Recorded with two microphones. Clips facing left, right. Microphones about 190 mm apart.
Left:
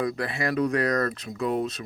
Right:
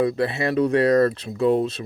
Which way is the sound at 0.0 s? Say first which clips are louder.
Right 6 dB; 25° right (ahead or behind).